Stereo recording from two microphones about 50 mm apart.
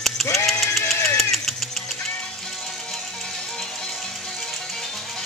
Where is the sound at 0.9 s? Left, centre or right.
Left.